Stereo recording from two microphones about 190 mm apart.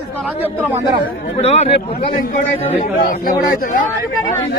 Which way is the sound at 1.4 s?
35° left (ahead or behind).